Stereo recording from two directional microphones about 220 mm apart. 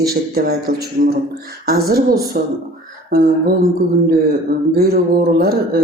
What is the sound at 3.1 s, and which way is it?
Speech, 45° right (ahead or behind).